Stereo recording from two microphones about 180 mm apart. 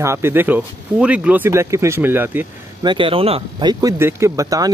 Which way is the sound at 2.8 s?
25° right (ahead or behind).